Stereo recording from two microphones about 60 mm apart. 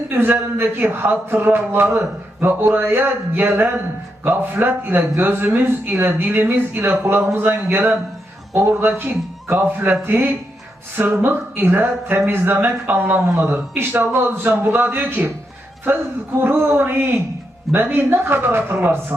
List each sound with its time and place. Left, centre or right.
0.1 s speech: right
8.5 s speech: right
16.4 s speech: right